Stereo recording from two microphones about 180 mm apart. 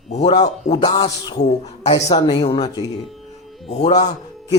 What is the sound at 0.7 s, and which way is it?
Speech, 25° left (ahead or behind).